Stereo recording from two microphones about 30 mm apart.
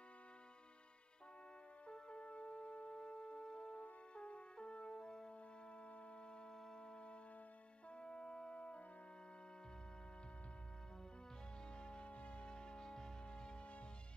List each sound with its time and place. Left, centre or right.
1.9 s music: left
4.1 s french horn: left
8.0 s music: left
11.8 s music: left
12.1 s music: left